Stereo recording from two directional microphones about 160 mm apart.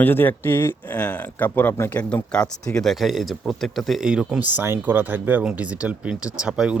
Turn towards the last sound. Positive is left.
turn(degrees=-5)  # may be behind; listen again after turning